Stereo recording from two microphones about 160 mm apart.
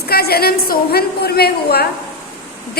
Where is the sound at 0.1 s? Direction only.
75° left (ahead or behind).